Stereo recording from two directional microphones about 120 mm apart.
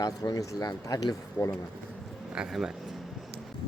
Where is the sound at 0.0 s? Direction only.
30° left (ahead or behind).